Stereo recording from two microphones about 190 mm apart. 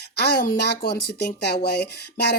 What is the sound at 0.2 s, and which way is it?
Speech, 55° left (ahead or behind).